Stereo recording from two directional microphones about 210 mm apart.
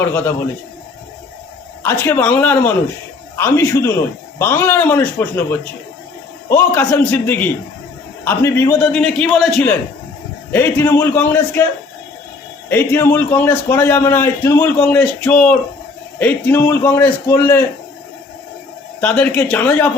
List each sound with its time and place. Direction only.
0.0 s a man's voice: 10° left (ahead or behind)
1.8 s a man's voice: 10° left (ahead or behind)
12.6 s a man's voice: 10° left (ahead or behind)
18.9 s a man's voice: 5° left (ahead or behind)